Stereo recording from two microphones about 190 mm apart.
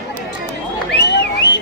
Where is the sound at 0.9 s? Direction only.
65° left (ahead or behind).